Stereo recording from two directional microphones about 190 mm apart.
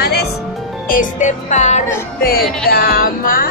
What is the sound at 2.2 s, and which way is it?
Speech, 50° left (ahead or behind).